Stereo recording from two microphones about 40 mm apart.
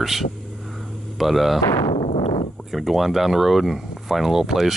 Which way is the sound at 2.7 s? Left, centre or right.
Centre.